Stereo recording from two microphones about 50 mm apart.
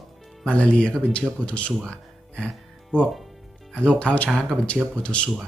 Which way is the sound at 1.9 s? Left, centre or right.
Centre.